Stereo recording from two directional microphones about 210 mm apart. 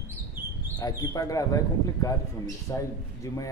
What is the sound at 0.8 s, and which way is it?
A man's voice, 20° left (ahead or behind).